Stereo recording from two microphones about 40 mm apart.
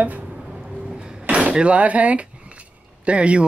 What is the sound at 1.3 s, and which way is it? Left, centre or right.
Speech, right.